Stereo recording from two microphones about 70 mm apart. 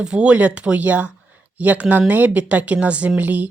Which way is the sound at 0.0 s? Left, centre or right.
Centre.